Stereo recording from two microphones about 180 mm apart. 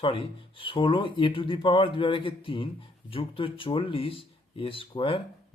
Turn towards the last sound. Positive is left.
turn(degrees=30)  # may be behind; listen again after turning